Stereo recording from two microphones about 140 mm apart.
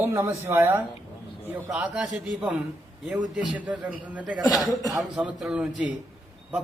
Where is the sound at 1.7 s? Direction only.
5° right (ahead or behind).